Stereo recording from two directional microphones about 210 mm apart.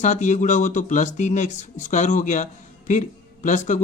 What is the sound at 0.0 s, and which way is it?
Speech, 35° left (ahead or behind).